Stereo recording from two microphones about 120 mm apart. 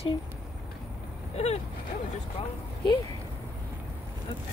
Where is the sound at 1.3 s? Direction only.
65° left (ahead or behind).